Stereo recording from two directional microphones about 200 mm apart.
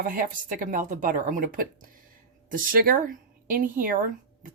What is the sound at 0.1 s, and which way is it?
Speech, 45° right (ahead or behind).